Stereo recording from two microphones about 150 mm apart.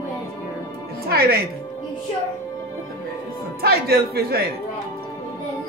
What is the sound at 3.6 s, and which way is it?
Speech, 90° right.